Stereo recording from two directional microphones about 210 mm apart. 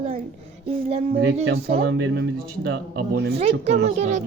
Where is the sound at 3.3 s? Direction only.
30° right (ahead or behind).